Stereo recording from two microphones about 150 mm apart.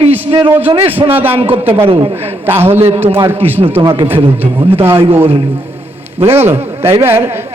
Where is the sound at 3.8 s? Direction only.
35° right (ahead or behind).